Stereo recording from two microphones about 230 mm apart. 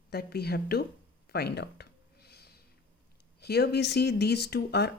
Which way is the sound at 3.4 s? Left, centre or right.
Left.